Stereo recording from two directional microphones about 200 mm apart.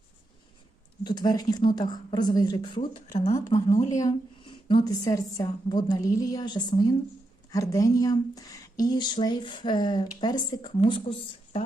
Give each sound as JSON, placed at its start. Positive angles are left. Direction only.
{"t": 1.0, "sound": "a woman's voice", "side_deg": 20}